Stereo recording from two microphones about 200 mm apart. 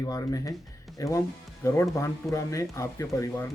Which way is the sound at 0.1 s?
15° left (ahead or behind).